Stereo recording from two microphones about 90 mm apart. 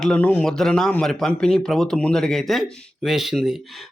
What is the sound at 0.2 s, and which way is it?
Speech, 20° left (ahead or behind).